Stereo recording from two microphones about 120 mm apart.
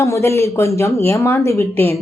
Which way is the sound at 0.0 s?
25° left (ahead or behind).